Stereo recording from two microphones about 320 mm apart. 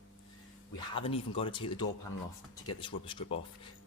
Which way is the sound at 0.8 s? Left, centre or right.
Centre.